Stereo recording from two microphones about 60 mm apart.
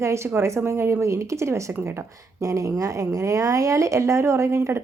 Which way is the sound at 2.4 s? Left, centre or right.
Right.